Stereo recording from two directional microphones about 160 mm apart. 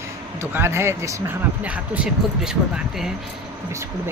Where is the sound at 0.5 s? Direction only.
15° right (ahead or behind).